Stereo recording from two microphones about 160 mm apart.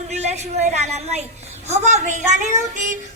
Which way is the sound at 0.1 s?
45° right (ahead or behind).